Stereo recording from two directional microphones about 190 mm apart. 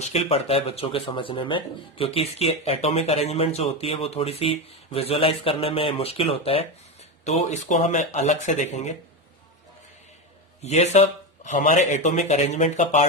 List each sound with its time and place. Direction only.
0.0 s speech: 30° left (ahead or behind)
10.6 s speech: 35° left (ahead or behind)